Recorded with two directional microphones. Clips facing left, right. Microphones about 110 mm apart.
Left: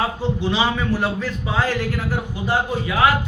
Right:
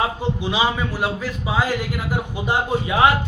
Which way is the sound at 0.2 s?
15° right (ahead or behind).